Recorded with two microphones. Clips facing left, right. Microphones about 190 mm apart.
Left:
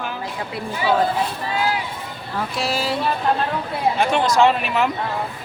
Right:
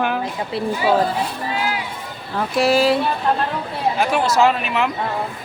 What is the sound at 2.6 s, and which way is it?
Speech, 60° right (ahead or behind).